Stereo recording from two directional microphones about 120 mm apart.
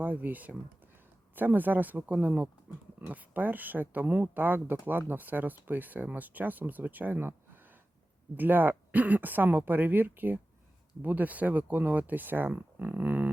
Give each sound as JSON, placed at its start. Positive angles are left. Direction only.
{"t": 0.0, "sound": "speech", "side_deg": -15}